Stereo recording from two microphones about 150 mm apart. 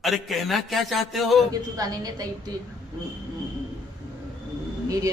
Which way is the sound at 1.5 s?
25° right (ahead or behind).